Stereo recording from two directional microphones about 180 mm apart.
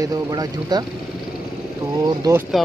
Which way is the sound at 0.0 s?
20° right (ahead or behind).